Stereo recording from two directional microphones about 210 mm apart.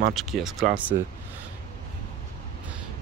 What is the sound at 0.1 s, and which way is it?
Speech, centre (ahead or behind).